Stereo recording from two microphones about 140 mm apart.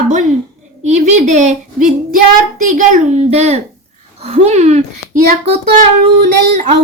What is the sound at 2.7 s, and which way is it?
A woman's voice, 65° right (ahead or behind).